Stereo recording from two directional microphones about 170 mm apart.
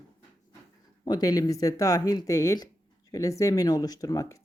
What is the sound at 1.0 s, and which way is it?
Speech, 25° left (ahead or behind).